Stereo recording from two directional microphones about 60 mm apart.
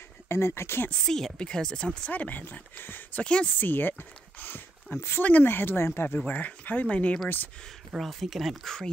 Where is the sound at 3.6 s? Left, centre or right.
Left.